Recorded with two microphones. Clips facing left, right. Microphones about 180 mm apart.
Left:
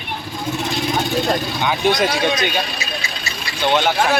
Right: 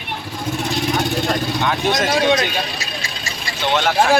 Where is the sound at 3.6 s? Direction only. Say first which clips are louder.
Left 2 dB; 5° left (ahead or behind).